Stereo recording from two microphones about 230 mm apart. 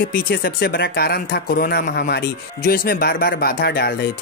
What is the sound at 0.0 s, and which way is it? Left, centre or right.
Speech, left.